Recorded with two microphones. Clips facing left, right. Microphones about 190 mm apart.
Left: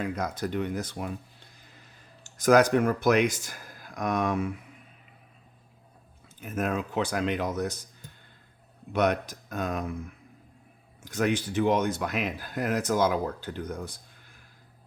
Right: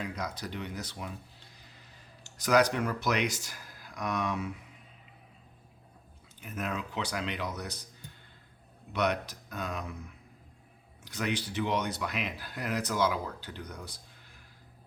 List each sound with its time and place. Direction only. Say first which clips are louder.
0.0 s speech: left 6 dB; 50° left (ahead or behind)
2.2 s speech: left 5 dB; 50° left (ahead or behind)
6.4 s speech: left 7 dB; 50° left (ahead or behind)
8.9 s speech: left 5 dB; 50° left (ahead or behind)